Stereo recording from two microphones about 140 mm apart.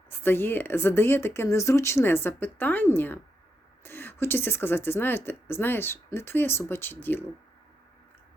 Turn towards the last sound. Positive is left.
turn(degrees=15)  # may be behind; listen again after turning